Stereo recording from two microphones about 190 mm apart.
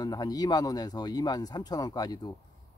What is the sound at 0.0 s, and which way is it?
Speech, 20° left (ahead or behind).